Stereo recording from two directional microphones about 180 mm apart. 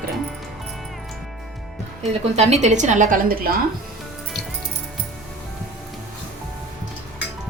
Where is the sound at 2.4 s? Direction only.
40° right (ahead or behind).